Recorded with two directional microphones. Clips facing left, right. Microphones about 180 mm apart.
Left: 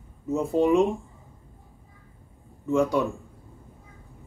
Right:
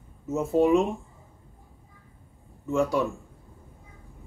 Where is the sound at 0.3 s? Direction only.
Centre (ahead or behind).